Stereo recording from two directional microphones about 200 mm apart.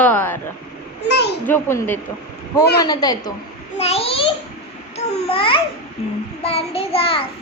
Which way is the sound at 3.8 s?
30° left (ahead or behind).